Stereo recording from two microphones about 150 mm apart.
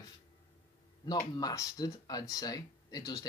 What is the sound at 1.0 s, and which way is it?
Speech, 25° left (ahead or behind).